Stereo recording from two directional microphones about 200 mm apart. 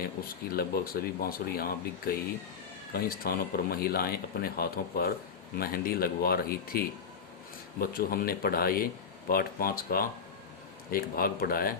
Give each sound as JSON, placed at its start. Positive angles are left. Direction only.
{"t": 0.5, "sound": "speech", "side_deg": 50}